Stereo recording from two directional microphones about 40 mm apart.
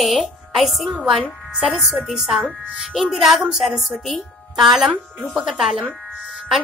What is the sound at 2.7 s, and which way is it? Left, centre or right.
A woman's voice, centre.